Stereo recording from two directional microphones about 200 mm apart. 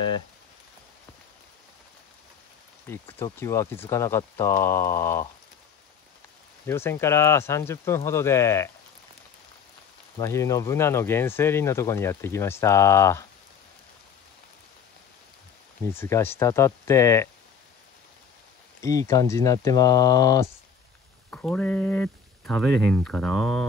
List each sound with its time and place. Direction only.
2.9 s speech: 10° left (ahead or behind)
6.6 s speech: 10° left (ahead or behind)
10.1 s speech: 15° left (ahead or behind)
15.9 s speech: 10° left (ahead or behind)
18.8 s speech: 15° left (ahead or behind)
21.3 s speech: 5° left (ahead or behind)